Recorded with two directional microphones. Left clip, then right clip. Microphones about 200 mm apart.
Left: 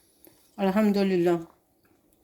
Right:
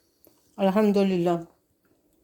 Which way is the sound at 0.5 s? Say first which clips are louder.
Right 3 dB; 25° right (ahead or behind).